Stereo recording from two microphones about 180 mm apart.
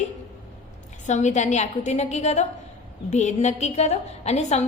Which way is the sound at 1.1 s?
40° left (ahead or behind).